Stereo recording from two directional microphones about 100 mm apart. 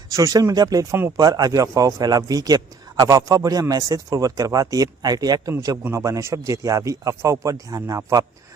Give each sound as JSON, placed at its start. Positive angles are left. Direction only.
{"t": 0.1, "sound": "a man's voice", "side_deg": -35}
{"t": 1.1, "sound": "a man's voice", "side_deg": -40}